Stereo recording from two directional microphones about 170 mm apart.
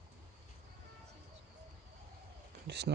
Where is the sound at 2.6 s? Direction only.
75° right (ahead or behind).